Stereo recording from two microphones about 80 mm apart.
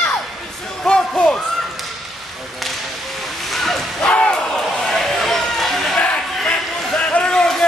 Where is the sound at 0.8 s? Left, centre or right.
Centre.